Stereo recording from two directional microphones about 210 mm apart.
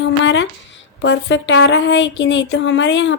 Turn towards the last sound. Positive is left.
turn(degrees=60)  # may be behind; listen again after turning